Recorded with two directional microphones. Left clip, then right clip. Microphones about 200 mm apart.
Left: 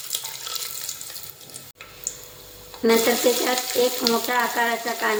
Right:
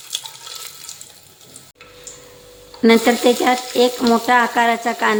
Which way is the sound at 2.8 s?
55° right (ahead or behind).